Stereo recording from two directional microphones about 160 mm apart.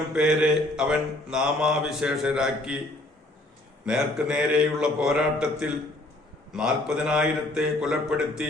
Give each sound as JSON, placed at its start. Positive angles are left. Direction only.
{"t": 0.1, "sound": "mantra", "side_deg": -5}
{"t": 3.8, "sound": "mantra", "side_deg": -5}